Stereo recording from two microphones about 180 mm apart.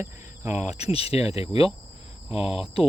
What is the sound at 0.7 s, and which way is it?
Speech, 35° left (ahead or behind).